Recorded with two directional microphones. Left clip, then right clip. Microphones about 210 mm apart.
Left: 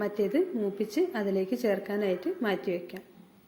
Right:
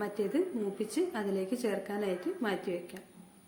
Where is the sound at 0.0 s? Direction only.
15° left (ahead or behind).